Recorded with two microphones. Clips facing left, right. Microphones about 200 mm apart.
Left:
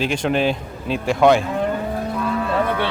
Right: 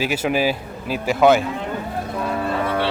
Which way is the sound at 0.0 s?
5° right (ahead or behind).